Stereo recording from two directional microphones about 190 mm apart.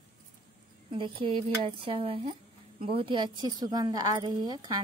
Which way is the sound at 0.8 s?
25° right (ahead or behind).